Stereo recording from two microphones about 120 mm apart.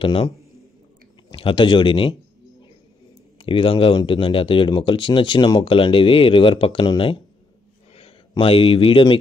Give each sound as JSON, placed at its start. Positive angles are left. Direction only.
{"t": 0.0, "sound": "speech", "side_deg": 45}
{"t": 1.3, "sound": "speech", "side_deg": 45}
{"t": 3.3, "sound": "a man's voice", "side_deg": 45}